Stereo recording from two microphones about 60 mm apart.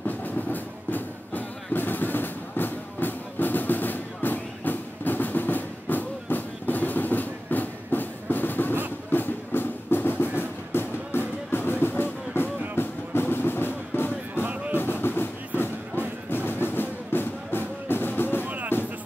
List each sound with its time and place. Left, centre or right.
0.0 s music: left
14.4 s music: right
14.8 s music: left
18.4 s music: right